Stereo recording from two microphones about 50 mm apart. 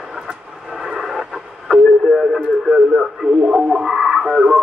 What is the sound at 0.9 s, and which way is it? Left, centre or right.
Radio, centre.